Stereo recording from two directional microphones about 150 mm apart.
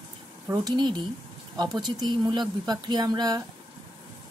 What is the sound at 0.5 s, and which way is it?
Speech, 25° right (ahead or behind).